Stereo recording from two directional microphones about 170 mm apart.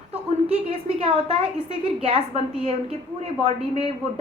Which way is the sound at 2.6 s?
35° right (ahead or behind).